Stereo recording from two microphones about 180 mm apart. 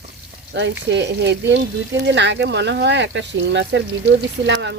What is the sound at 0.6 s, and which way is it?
Speech, 75° right (ahead or behind).